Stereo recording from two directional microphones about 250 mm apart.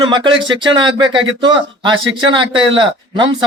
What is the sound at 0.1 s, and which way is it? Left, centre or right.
A man's voice, centre.